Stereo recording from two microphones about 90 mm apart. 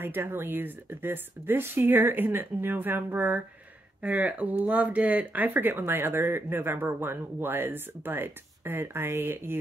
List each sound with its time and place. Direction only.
0.0 s speech: 25° right (ahead or behind)